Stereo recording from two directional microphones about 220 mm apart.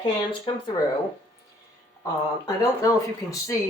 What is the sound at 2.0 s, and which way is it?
Speech, 15° left (ahead or behind).